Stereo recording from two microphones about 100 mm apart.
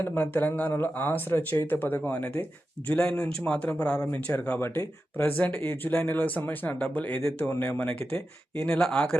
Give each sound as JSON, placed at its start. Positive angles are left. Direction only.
{"t": 0.0, "sound": "speech", "side_deg": 20}